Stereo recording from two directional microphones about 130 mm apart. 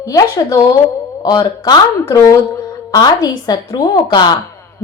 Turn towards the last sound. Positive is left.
turn(degrees=35)  # may be behind; listen again after turning